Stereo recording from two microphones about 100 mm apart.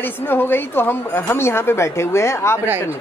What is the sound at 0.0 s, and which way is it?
Speech, 20° left (ahead or behind).